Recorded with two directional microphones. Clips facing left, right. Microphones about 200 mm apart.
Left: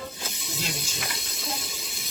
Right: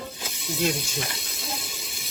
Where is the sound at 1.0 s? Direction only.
30° right (ahead or behind).